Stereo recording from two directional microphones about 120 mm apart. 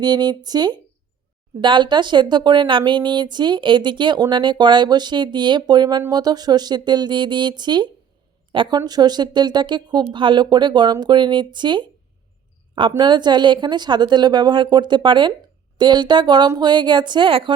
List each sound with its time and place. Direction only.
0.0 s a woman's voice: 35° right (ahead or behind)
13.0 s a woman's voice: 40° right (ahead or behind)